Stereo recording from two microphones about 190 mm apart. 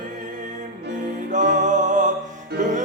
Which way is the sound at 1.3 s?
40° right (ahead or behind).